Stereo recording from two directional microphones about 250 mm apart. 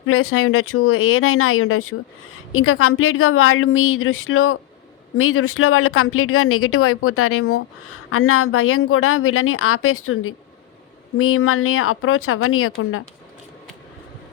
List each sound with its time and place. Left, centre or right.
0.0 s a woman's voice: left